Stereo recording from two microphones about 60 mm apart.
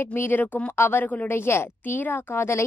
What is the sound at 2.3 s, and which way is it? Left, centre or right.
Speech, left.